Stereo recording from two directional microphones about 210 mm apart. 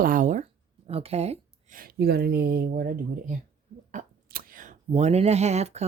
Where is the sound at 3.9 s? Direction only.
40° right (ahead or behind).